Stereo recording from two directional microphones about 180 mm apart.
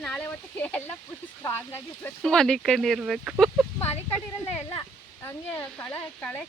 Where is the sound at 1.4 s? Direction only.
10° left (ahead or behind).